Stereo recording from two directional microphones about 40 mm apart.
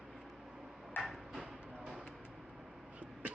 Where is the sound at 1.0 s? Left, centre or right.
Left.